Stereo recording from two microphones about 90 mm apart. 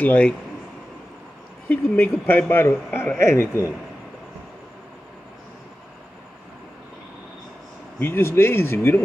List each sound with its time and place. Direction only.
0.0 s speech: 15° left (ahead or behind)
1.7 s speech: 25° left (ahead or behind)
8.0 s speech: 25° left (ahead or behind)